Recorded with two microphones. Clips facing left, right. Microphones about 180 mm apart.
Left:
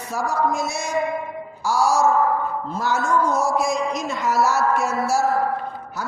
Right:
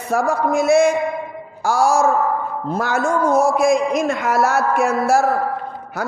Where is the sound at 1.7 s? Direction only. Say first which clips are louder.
Right 3 dB; 55° right (ahead or behind).